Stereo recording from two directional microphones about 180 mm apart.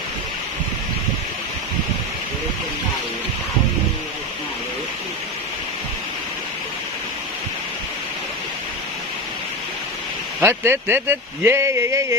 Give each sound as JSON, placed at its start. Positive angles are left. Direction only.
{"t": 10.4, "sound": "speech", "side_deg": -15}